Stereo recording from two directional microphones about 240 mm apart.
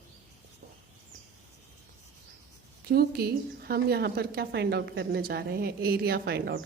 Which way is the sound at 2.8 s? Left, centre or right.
Right.